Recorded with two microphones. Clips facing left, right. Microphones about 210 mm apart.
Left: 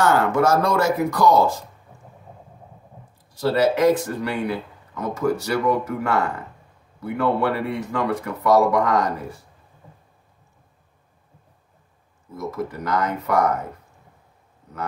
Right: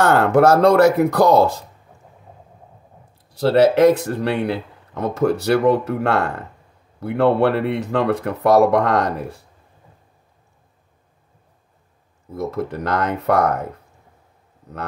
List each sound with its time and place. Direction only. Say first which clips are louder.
0.0 s speech: right 4 dB; 65° right (ahead or behind)
3.3 s a man's voice: right 5 dB; 65° right (ahead or behind)
12.4 s speech: right 4 dB; 65° right (ahead or behind)